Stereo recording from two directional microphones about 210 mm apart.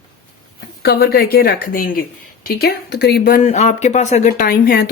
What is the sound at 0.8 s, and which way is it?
A woman's voice, 50° left (ahead or behind).